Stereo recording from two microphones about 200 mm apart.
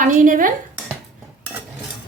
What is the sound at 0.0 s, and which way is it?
Speech, 40° right (ahead or behind).